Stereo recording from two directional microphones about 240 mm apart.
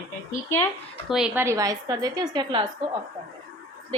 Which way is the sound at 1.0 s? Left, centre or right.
Centre.